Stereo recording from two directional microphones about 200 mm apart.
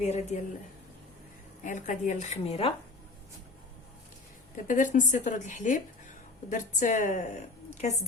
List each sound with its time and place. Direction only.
0.0 s a woman's voice: 35° left (ahead or behind)
1.6 s a woman's voice: 40° left (ahead or behind)
4.5 s a woman's voice: 40° left (ahead or behind)